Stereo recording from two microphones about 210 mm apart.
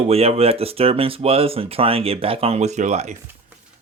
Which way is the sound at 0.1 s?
30° right (ahead or behind).